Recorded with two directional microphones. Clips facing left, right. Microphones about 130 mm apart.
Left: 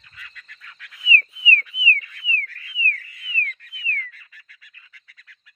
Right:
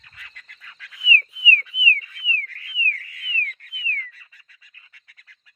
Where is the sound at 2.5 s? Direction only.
65° right (ahead or behind).